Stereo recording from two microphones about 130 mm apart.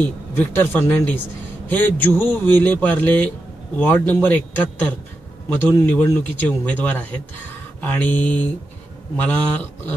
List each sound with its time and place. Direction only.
0.0 s a man's voice: 15° left (ahead or behind)